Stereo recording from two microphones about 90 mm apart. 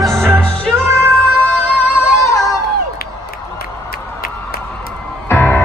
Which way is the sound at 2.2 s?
40° left (ahead or behind).